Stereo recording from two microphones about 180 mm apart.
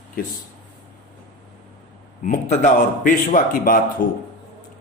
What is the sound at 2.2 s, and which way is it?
Speech, 45° left (ahead or behind).